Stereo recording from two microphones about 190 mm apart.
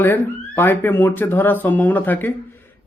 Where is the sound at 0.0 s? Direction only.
10° left (ahead or behind).